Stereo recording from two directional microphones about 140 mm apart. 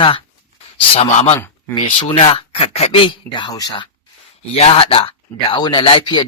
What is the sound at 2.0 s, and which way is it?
Speech, 45° left (ahead or behind).